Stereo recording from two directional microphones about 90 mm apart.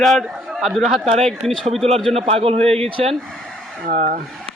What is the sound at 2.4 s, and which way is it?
Speech, 90° right.